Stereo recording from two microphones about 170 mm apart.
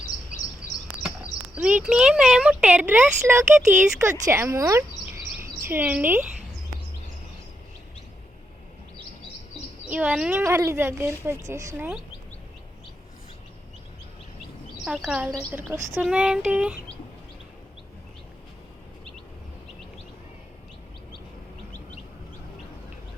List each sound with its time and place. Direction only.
1.5 s speech: 5° right (ahead or behind)
9.8 s speech: 5° right (ahead or behind)
14.8 s a woman's voice: 5° right (ahead or behind)